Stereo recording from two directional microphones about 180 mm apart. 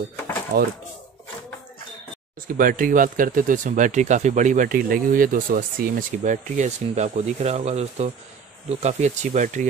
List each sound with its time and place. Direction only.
0.5 s speech: 55° right (ahead or behind)
2.4 s speech: 50° right (ahead or behind)